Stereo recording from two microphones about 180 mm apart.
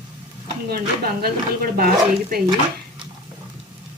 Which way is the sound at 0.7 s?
60° right (ahead or behind).